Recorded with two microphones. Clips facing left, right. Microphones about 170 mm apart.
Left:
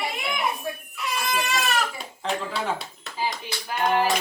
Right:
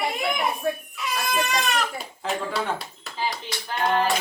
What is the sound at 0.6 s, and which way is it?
Speech, 60° right (ahead or behind).